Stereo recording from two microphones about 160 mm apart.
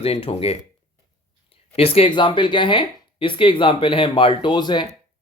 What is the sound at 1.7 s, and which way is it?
Speech, 35° left (ahead or behind).